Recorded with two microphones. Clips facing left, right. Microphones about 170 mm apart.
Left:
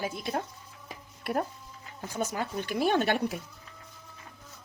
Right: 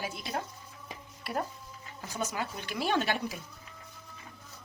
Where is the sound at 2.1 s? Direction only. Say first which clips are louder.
Left 3 dB; 55° left (ahead or behind).